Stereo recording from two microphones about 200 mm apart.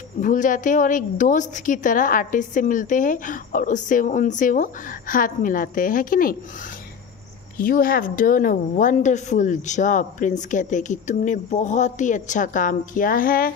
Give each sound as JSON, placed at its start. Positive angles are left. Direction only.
{"t": 0.2, "sound": "a woman's voice", "side_deg": 40}
{"t": 7.5, "sound": "a woman's voice", "side_deg": 45}